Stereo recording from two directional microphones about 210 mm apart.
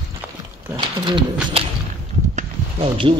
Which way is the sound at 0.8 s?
20° right (ahead or behind).